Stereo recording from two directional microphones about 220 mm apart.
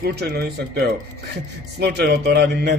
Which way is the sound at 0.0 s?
45° right (ahead or behind).